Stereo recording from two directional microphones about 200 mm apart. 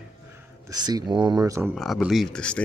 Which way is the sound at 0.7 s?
20° right (ahead or behind).